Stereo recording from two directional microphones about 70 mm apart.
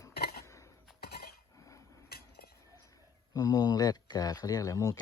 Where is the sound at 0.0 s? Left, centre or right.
Left.